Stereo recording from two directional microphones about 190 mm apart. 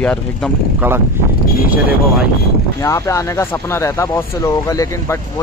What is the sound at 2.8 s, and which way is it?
Speech, 15° left (ahead or behind).